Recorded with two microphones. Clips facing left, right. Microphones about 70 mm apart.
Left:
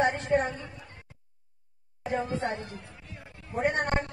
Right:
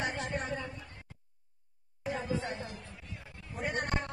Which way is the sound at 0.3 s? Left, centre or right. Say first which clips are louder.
Left 12 dB; left.